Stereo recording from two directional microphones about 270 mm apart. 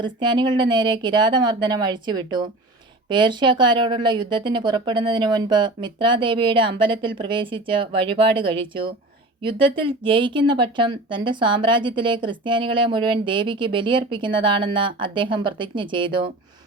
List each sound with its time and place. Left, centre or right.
0.0 s a woman's voice: centre